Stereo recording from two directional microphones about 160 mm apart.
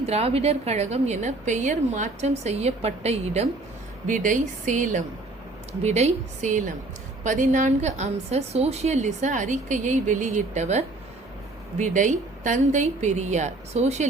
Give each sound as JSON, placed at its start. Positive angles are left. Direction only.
{"t": 0.0, "sound": "a woman's voice", "side_deg": -40}
{"t": 4.0, "sound": "a woman's voice", "side_deg": -55}